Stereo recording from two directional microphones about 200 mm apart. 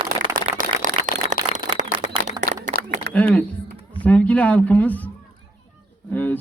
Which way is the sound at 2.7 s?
45° left (ahead or behind).